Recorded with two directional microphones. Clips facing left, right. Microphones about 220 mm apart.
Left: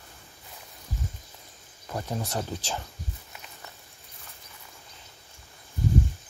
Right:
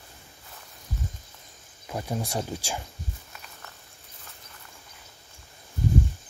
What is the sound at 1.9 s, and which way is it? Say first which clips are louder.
Speech: right 1 dB; 10° right (ahead or behind).